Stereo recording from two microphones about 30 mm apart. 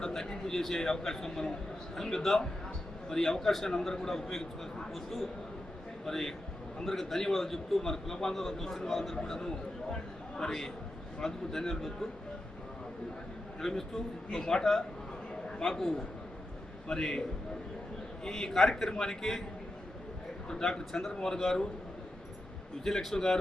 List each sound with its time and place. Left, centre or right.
0.0 s a sound: centre
0.7 s a man's voice: centre
6.1 s a man's voice: centre
9.1 s a man's voice: centre
13.6 s a man's voice: centre
18.3 s a man's voice: centre
20.5 s a man's voice: centre
21.3 s a man's voice: centre
22.8 s a man's voice: centre